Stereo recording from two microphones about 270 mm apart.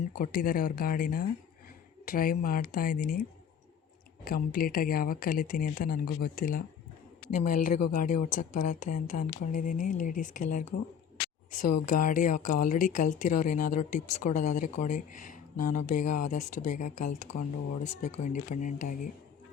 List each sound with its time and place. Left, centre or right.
0.2 s speech: left
4.2 s speech: left